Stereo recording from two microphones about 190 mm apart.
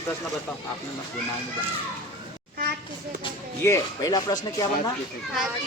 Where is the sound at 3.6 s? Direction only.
15° left (ahead or behind).